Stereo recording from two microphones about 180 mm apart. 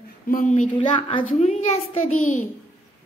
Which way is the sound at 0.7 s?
30° left (ahead or behind).